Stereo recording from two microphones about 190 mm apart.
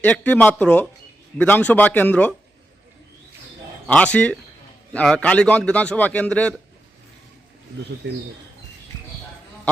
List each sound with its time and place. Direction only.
0.0 s a man's voice: 10° left (ahead or behind)
3.8 s a man's voice: 5° left (ahead or behind)
8.0 s speech: 60° right (ahead or behind)